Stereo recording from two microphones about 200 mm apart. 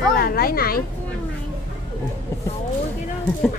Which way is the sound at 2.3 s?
15° left (ahead or behind).